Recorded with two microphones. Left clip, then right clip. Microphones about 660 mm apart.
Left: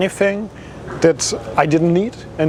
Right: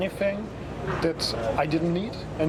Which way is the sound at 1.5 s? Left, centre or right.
Left.